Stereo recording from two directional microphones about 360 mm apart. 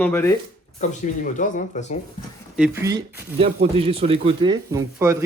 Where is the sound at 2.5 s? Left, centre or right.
Centre.